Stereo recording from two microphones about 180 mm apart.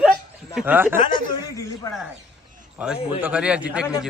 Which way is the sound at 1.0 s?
25° left (ahead or behind).